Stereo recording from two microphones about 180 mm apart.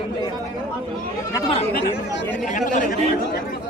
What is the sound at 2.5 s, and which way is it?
Speech, 45° left (ahead or behind).